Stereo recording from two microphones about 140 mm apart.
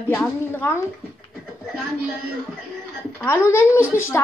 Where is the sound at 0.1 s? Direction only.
15° left (ahead or behind).